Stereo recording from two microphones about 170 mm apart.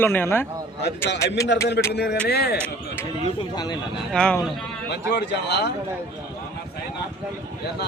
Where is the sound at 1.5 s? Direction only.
90° left.